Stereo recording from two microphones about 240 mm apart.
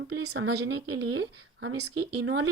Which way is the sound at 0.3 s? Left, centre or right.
Right.